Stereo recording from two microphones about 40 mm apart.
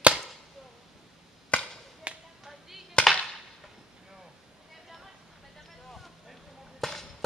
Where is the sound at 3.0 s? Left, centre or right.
Left.